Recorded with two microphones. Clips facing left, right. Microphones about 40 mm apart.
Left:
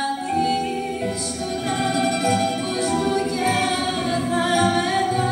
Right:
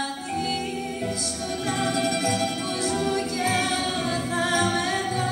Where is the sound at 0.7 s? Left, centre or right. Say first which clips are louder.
Left 4 dB; left.